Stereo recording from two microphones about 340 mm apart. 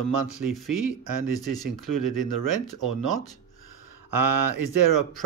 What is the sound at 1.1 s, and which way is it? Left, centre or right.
Speech, right.